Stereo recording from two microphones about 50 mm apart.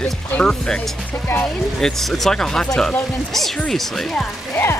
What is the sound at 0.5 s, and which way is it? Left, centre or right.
Speech, centre.